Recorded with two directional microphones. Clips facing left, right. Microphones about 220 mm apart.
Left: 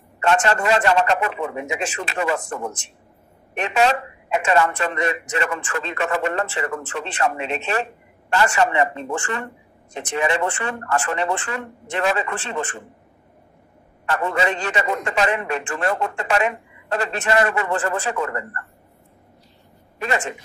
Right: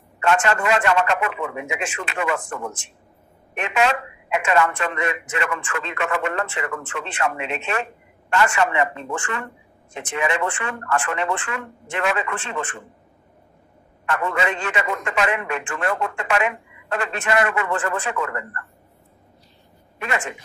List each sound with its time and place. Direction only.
0.2 s speech: 35° left (ahead or behind)
14.0 s speech: 35° left (ahead or behind)
20.0 s speech: 35° left (ahead or behind)